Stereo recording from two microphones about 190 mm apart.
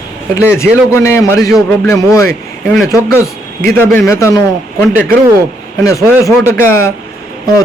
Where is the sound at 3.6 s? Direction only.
10° left (ahead or behind).